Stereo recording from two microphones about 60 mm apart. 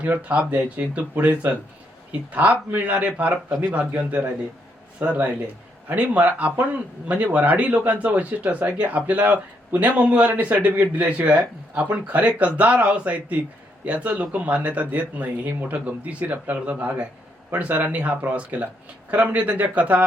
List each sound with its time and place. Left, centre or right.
0.0 s speech: right